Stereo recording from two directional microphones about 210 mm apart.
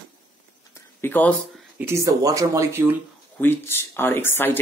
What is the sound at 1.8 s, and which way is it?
Speech, 15° right (ahead or behind).